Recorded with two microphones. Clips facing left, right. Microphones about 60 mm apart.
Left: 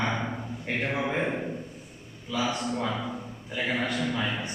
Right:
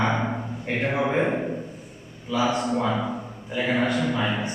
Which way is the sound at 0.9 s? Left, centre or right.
Right.